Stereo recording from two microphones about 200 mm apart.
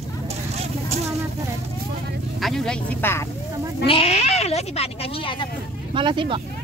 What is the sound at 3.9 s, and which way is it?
Speech, 30° left (ahead or behind).